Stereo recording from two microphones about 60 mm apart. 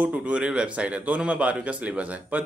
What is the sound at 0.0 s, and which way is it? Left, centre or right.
A man's voice, right.